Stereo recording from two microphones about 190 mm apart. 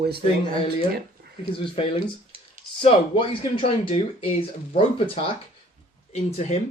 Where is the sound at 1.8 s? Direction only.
30° left (ahead or behind).